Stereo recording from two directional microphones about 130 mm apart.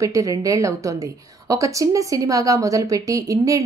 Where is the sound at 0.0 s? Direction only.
25° right (ahead or behind).